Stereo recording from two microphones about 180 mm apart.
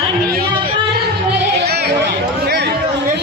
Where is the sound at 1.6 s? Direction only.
65° right (ahead or behind).